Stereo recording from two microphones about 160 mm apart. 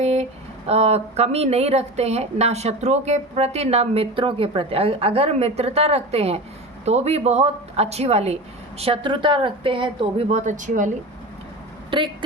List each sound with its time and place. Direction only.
0.0 s a sound: 45° right (ahead or behind)
0.7 s a woman's voice: 40° right (ahead or behind)
11.9 s speech: 30° right (ahead or behind)